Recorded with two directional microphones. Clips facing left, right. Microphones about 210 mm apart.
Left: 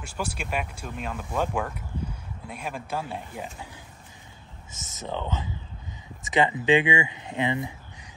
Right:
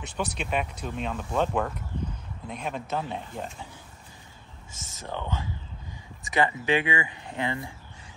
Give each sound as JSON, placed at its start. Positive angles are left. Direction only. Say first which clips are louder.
{"t": 0.0, "sound": "speech", "louder": "right 1 dB", "side_deg": 10}
{"t": 5.0, "sound": "speech", "louder": "left 2 dB", "side_deg": 20}